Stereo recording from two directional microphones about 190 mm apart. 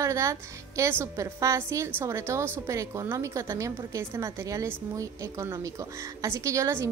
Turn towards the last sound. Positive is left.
turn(degrees=-15)  # may be behind; listen again after turning